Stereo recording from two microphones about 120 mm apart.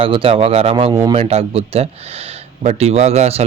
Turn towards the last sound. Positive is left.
turn(degrees=-60)  # may be behind; listen again after turning